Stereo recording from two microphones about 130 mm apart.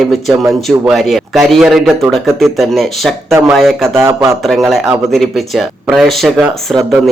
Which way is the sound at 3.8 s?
20° right (ahead or behind).